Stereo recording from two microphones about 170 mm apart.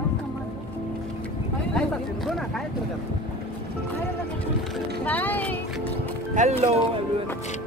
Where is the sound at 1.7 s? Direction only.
5° left (ahead or behind).